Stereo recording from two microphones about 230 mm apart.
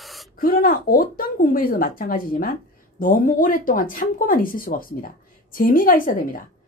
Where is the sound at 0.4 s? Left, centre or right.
Left.